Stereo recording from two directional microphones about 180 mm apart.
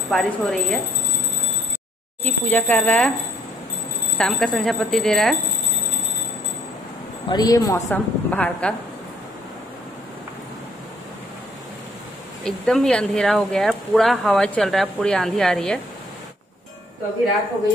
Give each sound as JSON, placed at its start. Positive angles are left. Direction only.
{"t": 0.1, "sound": "speech", "side_deg": 0}
{"t": 2.2, "sound": "speech", "side_deg": 10}
{"t": 4.2, "sound": "speech", "side_deg": 0}
{"t": 7.2, "sound": "speech", "side_deg": 20}
{"t": 8.3, "sound": "speech", "side_deg": 5}
{"t": 12.4, "sound": "speech", "side_deg": 5}